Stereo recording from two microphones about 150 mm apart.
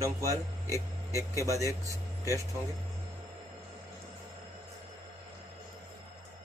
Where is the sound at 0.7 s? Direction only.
20° left (ahead or behind).